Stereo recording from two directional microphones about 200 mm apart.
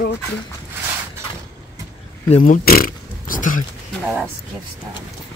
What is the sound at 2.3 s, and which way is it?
Speech, 40° left (ahead or behind).